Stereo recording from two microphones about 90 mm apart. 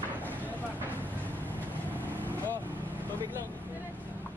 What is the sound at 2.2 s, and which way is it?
Vehicle, 20° left (ahead or behind).